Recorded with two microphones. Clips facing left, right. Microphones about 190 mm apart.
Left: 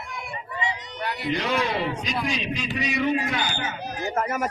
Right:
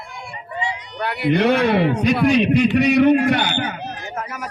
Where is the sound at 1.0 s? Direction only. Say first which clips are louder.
Right 10 dB; 65° right (ahead or behind).